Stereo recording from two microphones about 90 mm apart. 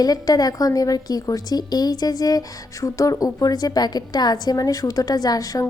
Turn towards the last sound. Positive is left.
turn(degrees=40)  # may be behind; listen again after turning